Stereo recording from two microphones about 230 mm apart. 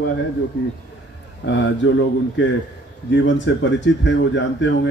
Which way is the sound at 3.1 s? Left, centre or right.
Left.